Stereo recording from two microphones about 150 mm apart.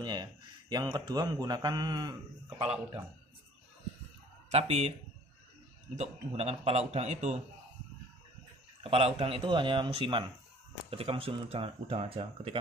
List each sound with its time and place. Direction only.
0.0 s a man's voice: 30° right (ahead or behind)
4.5 s a man's voice: 45° right (ahead or behind)
5.9 s a man's voice: 45° right (ahead or behind)
8.8 s speech: 40° right (ahead or behind)